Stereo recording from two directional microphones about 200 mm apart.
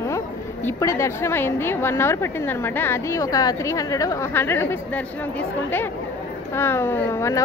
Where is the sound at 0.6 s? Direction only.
15° left (ahead or behind).